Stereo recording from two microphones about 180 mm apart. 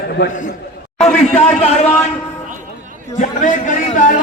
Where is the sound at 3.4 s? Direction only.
45° left (ahead or behind).